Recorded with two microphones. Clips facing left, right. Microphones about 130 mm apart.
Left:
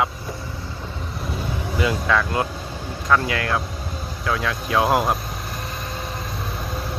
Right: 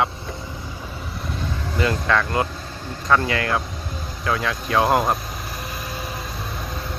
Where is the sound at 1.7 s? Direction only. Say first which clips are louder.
Even; 5° left (ahead or behind).